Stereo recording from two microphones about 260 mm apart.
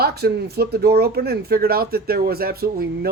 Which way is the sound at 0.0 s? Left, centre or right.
Right.